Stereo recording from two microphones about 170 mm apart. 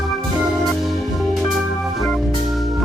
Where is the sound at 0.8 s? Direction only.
Centre (ahead or behind).